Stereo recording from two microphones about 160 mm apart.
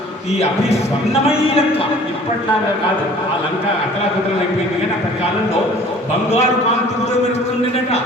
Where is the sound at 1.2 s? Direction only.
35° left (ahead or behind).